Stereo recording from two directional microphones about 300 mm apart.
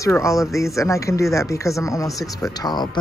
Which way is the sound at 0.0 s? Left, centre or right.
Centre.